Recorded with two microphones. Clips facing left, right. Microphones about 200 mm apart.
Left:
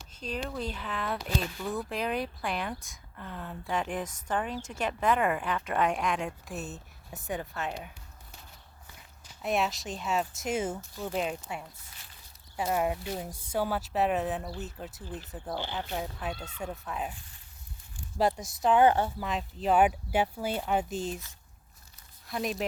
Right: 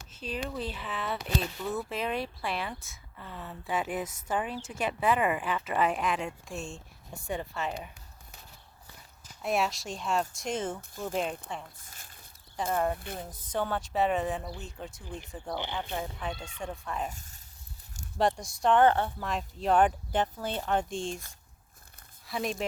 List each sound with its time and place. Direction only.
0.2 s speech: 5° right (ahead or behind)
9.4 s speech: centre (ahead or behind)
11.9 s a sound: 45° right (ahead or behind)
12.5 s speech: 10° left (ahead or behind)
17.1 s speech: 45° right (ahead or behind)
18.2 s speech: 5° left (ahead or behind)
22.3 s speech: centre (ahead or behind)